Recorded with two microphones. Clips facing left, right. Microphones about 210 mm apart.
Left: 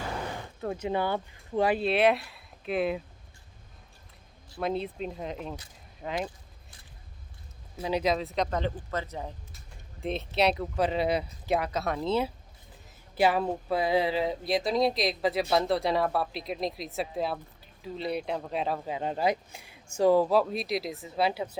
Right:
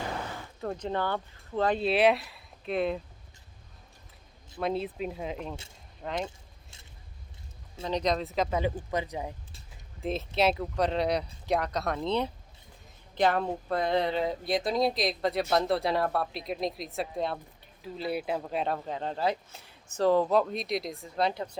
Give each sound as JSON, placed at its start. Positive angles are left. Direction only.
{"t": 0.6, "sound": "speech", "side_deg": 5}
{"t": 1.8, "sound": "speech", "side_deg": 0}
{"t": 4.5, "sound": "speech", "side_deg": 0}
{"t": 6.2, "sound": "keys jangling", "side_deg": -25}
{"t": 7.8, "sound": "speech", "side_deg": 10}
{"t": 10.0, "sound": "speech", "side_deg": 0}